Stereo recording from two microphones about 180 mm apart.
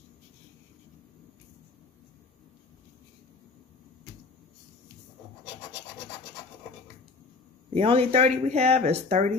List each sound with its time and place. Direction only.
7.7 s speech: 35° right (ahead or behind)